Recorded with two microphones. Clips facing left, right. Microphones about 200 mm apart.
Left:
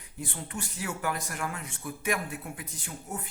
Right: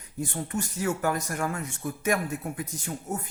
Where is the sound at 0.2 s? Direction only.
45° right (ahead or behind).